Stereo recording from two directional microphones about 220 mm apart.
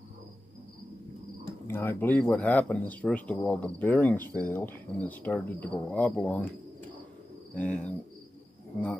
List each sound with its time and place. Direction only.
1.7 s speech: 10° left (ahead or behind)
7.5 s speech: 5° left (ahead or behind)